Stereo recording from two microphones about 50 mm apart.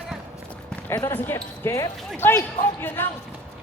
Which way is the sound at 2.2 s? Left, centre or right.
Left.